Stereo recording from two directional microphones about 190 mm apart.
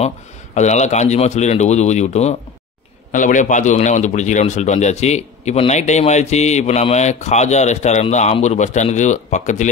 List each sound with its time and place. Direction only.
0.6 s a man's voice: 35° left (ahead or behind)